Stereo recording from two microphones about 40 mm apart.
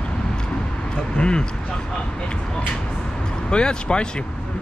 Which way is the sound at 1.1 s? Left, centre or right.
Left.